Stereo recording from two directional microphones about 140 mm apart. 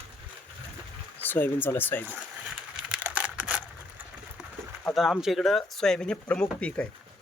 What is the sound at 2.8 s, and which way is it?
Crushing, 10° right (ahead or behind).